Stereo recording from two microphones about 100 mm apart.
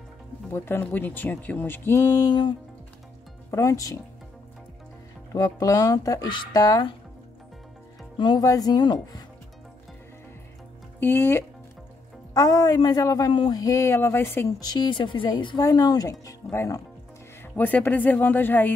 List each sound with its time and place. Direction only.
0.5 s speech: 20° left (ahead or behind)
2.2 s speech: 50° left (ahead or behind)
3.4 s speech: 30° left (ahead or behind)
5.3 s speech: 35° left (ahead or behind)
6.2 s speech: 50° left (ahead or behind)
8.2 s speech: 45° left (ahead or behind)
11.0 s speech: 25° left (ahead or behind)
12.4 s speech: 40° left (ahead or behind)
13.3 s speech: 55° left (ahead or behind)
13.6 s speech: 35° left (ahead or behind)
14.6 s speech: 45° left (ahead or behind)
17.4 s speech: 15° left (ahead or behind)